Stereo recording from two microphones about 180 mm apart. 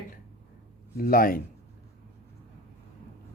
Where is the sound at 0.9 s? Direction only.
55° left (ahead or behind).